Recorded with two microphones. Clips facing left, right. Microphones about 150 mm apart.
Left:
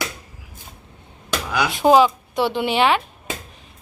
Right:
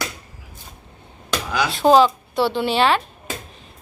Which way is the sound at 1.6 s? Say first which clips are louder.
Even; 10° left (ahead or behind).